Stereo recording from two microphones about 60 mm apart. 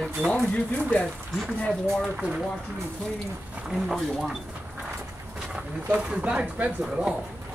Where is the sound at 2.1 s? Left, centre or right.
Centre.